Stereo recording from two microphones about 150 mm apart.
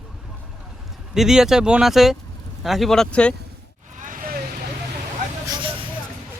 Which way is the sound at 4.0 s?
75° right (ahead or behind).